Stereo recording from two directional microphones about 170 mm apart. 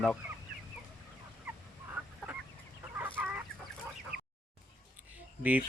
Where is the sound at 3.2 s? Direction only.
5° right (ahead or behind).